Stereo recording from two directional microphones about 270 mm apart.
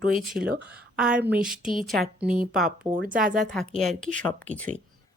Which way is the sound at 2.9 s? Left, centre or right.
Right.